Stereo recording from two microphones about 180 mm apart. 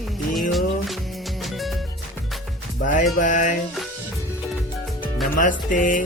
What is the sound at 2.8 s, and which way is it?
Music, 45° left (ahead or behind).